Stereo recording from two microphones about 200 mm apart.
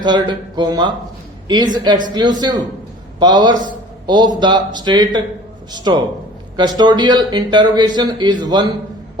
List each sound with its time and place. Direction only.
0.0 s a man's voice: 20° right (ahead or behind)